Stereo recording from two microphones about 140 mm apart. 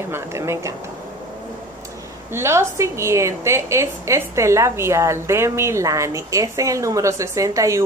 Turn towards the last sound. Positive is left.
turn(degrees=-20)  # may be behind; listen again after turning